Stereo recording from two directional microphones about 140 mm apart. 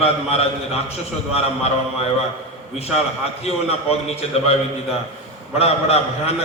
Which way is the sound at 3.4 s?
45° left (ahead or behind).